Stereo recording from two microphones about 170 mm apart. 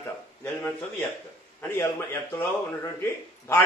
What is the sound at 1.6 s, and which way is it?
Speech, 15° left (ahead or behind).